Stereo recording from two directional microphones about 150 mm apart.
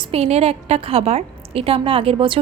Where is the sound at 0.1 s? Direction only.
45° right (ahead or behind).